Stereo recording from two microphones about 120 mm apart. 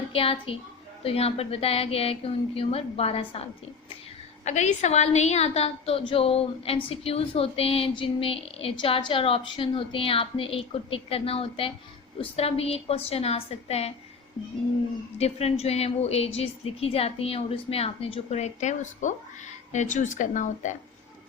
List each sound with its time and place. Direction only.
0.1 s a woman's voice: 50° left (ahead or behind)
4.4 s a woman's voice: 75° left (ahead or behind); by 13.9 s 60° left (ahead or behind)
15.2 s a woman's voice: 60° left (ahead or behind); by 20.7 s 90° left